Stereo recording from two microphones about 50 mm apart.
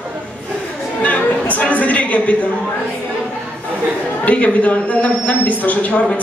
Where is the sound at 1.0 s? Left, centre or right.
Left.